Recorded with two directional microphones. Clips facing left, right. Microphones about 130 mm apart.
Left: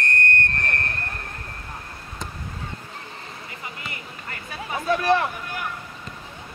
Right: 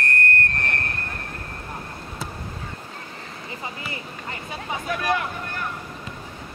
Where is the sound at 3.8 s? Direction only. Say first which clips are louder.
Right 3 dB; 25° right (ahead or behind).